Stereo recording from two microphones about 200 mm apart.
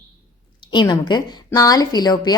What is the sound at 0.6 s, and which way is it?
A woman's voice, 25° left (ahead or behind).